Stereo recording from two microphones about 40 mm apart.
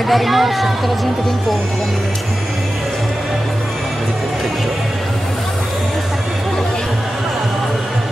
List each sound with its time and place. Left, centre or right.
0.1 s speech: centre